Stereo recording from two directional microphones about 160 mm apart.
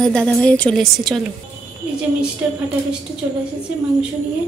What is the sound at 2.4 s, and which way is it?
Speech, 10° right (ahead or behind).